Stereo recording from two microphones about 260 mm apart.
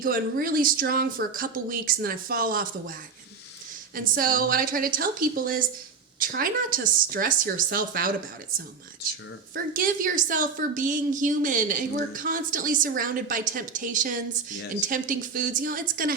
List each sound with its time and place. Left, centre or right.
0.0 s a woman's voice: right
3.9 s a woman's voice: right
9.7 s a woman's voice: right